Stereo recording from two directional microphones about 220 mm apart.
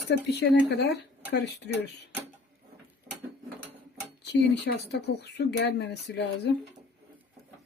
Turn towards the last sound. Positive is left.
turn(degrees=50)  # may be behind; listen again after turning